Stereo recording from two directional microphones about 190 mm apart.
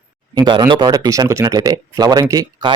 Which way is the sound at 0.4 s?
25° right (ahead or behind).